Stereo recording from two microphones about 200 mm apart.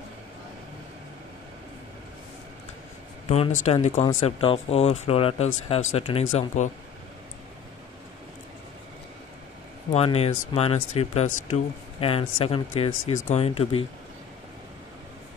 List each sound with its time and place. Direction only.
3.3 s speech: 30° left (ahead or behind)
9.9 s speech: 30° left (ahead or behind)